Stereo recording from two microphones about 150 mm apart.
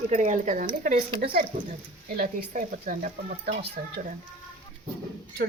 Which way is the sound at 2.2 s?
65° right (ahead or behind).